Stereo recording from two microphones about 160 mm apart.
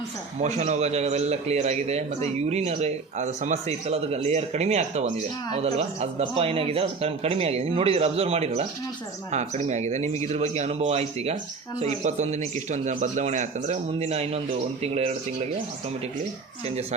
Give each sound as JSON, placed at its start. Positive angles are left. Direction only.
{"t": 0.3, "sound": "a man's voice", "side_deg": -45}